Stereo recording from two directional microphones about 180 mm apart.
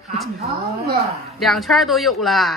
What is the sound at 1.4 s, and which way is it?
A man's voice, centre (ahead or behind).